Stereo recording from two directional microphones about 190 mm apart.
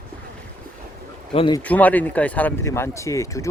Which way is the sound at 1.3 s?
30° left (ahead or behind).